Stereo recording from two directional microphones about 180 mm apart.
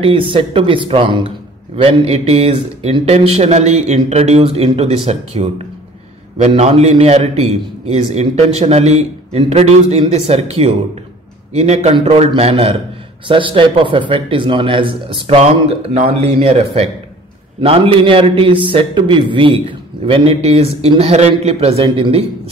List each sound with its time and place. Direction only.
0.0 s a man's voice: 30° right (ahead or behind)